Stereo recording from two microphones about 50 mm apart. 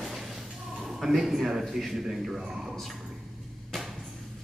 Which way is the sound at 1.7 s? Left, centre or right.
Centre.